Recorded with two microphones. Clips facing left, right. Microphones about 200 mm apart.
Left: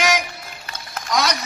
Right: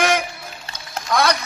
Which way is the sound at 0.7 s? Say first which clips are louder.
Left 2 dB; 30° right (ahead or behind).